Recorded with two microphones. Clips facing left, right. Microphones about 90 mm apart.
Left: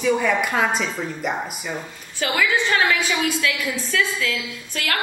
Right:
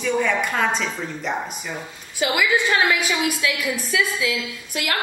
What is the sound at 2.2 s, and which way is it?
A woman's voice, 15° right (ahead or behind).